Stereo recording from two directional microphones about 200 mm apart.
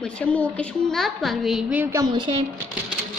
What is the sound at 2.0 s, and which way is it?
Speech, 20° right (ahead or behind).